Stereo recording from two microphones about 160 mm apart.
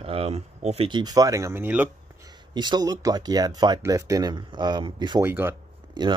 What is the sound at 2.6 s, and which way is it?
Speech, 25° right (ahead or behind).